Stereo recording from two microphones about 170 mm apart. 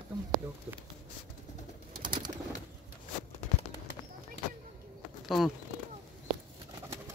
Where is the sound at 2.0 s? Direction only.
25° right (ahead or behind).